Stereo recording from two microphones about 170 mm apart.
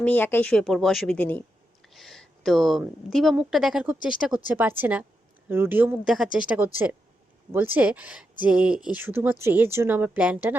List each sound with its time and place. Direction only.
0.0 s a woman's voice: 10° left (ahead or behind); by 10.5 s 5° right (ahead or behind)